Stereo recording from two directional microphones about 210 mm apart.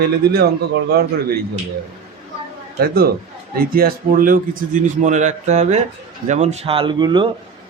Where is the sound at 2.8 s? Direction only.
45° right (ahead or behind); by 7.3 s 20° right (ahead or behind).